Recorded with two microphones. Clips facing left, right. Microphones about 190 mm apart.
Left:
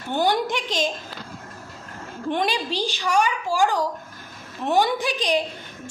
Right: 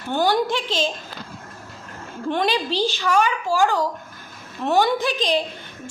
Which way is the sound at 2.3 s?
15° left (ahead or behind).